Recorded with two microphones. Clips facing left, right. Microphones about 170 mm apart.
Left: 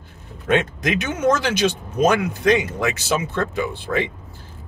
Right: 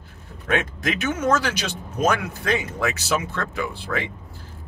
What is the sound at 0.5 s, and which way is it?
Speech, 20° left (ahead or behind).